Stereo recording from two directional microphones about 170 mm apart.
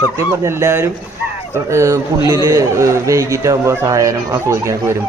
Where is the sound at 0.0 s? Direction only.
15° right (ahead or behind).